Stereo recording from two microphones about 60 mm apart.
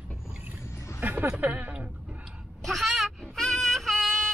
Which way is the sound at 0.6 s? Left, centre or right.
Left.